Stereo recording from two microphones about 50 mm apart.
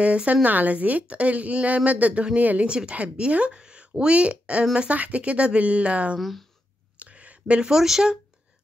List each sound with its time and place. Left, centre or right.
0.0 s speech: right
6.1 s speech: centre
7.0 s a sound: right
7.7 s speech: centre